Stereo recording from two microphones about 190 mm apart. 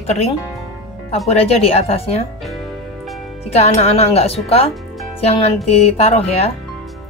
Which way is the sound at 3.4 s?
35° left (ahead or behind).